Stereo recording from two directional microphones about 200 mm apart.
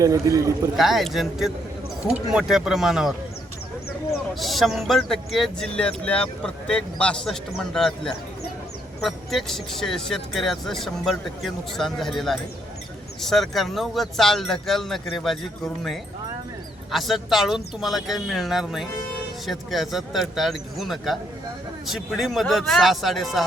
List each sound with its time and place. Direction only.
0.0 s a man's voice: 15° right (ahead or behind)
0.8 s speech: centre (ahead or behind)
4.4 s speech: centre (ahead or behind)